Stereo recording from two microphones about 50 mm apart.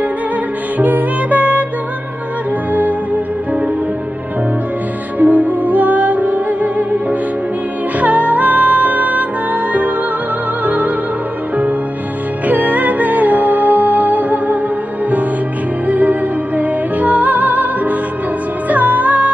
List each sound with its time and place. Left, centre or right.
0.7 s music: right
5.2 s music: right
10.6 s music: right
12.4 s music: right
15.9 s music: right